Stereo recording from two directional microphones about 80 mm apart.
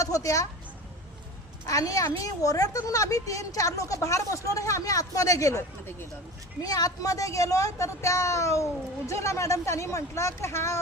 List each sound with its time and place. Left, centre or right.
0.0 s a woman's voice: left
1.6 s a woman's voice: left